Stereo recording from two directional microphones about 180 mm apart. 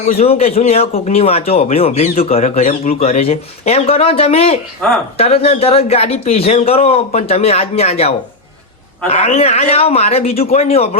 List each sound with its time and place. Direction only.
0.1 s speech: 35° left (ahead or behind)
4.8 s speech: 5° left (ahead or behind)
5.1 s speech: 35° left (ahead or behind)